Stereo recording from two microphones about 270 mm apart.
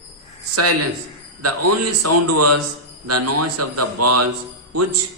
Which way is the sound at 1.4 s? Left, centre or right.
Right.